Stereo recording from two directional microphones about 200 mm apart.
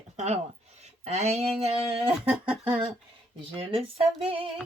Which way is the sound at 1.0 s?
30° right (ahead or behind).